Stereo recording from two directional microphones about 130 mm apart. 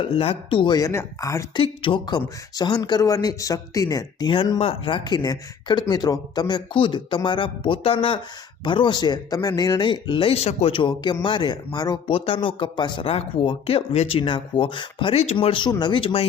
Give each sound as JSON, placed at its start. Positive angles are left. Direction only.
{"t": 0.0, "sound": "speech", "side_deg": 45}
{"t": 0.8, "sound": "speech", "side_deg": 25}
{"t": 1.5, "sound": "speech", "side_deg": 40}